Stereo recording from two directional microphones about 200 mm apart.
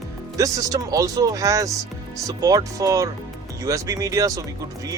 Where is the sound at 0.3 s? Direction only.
15° right (ahead or behind).